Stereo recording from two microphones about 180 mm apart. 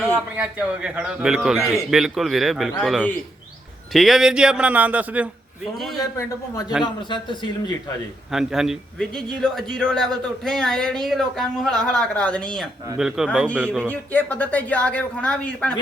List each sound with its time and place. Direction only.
0.3 s a man's voice: 5° right (ahead or behind)
6.0 s speech: 20° left (ahead or behind)
8.3 s a man's voice: 5° right (ahead or behind)
13.8 s a woman's voice: 10° left (ahead or behind)